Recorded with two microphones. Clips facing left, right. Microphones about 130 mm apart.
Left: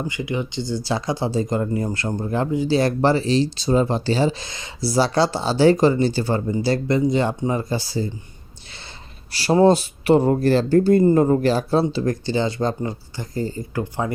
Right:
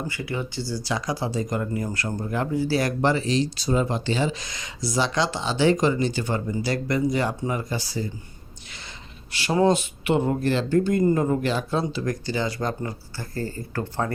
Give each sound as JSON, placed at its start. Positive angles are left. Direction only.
{"t": 0.1, "sound": "speech", "side_deg": 20}
{"t": 9.3, "sound": "speech", "side_deg": 35}